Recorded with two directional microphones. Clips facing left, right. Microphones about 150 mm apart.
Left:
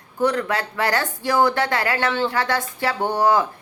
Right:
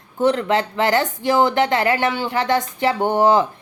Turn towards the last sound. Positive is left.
turn(degrees=-20)  # may be behind; listen again after turning